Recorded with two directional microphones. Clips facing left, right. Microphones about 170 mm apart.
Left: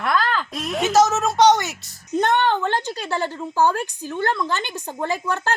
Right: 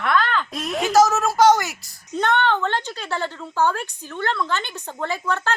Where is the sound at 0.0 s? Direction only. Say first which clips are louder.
Even; 35° left (ahead or behind).